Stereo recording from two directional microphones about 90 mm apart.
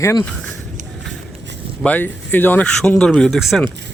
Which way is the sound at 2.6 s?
10° left (ahead or behind).